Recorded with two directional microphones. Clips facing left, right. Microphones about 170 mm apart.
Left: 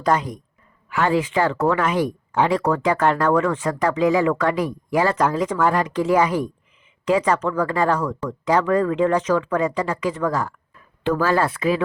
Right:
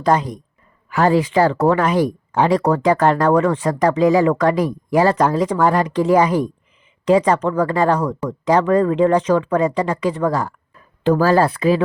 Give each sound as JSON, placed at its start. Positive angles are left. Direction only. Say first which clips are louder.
{"t": 0.0, "sound": "speech", "louder": "right 3 dB", "side_deg": -35}